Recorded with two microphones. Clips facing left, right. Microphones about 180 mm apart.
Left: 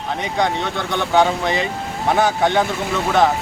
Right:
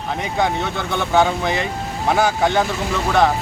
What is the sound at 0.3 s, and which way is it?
Speech, 5° right (ahead or behind).